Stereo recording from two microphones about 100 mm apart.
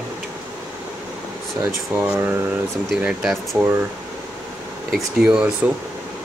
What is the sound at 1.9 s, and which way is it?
Speech, 20° right (ahead or behind).